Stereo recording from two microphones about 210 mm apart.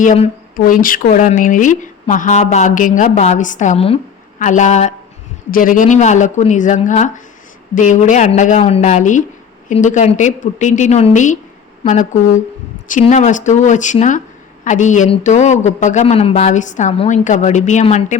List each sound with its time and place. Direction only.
0.0 s speech: 40° left (ahead or behind)